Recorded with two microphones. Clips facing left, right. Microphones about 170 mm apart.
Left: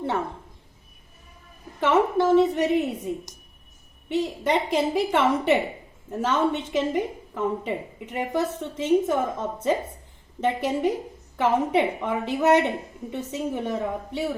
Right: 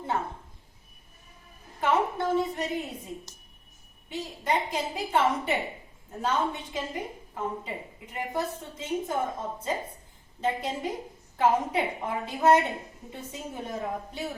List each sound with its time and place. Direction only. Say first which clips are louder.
1.8 s a woman's voice: left 6 dB; 80° left
4.1 s a woman's voice: left 6 dB; 75° left (ahead or behind)